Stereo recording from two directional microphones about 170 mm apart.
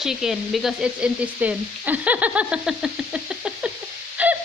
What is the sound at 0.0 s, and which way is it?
Frying, centre (ahead or behind).